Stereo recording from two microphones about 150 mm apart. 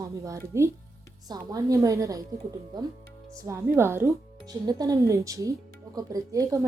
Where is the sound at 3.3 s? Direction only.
20° right (ahead or behind).